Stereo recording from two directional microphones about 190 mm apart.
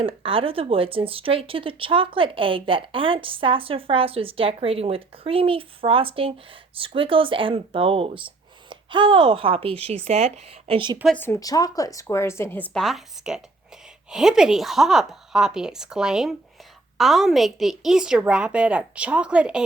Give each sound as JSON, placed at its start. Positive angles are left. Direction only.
{"t": 0.0, "sound": "speech", "side_deg": -30}
{"t": 11.1, "sound": "a woman's voice", "side_deg": 10}
{"t": 12.7, "sound": "a woman's voice", "side_deg": 0}